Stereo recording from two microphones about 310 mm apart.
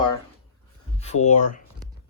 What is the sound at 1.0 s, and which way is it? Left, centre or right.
Speech, left.